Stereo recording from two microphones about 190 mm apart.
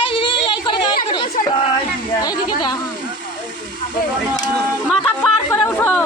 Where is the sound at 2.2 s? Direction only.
20° left (ahead or behind).